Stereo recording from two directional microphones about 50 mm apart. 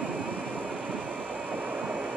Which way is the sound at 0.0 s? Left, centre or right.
Right.